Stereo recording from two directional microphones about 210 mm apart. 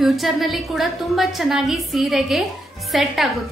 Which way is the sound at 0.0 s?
Centre (ahead or behind).